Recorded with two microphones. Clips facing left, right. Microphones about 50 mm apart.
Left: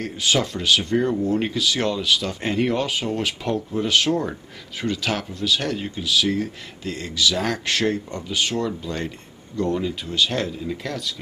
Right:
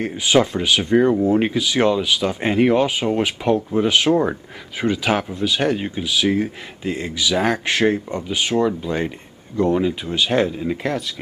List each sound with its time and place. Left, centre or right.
0.0 s speech: centre